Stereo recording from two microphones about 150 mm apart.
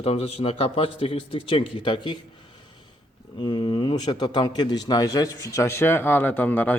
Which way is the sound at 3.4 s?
30° left (ahead or behind).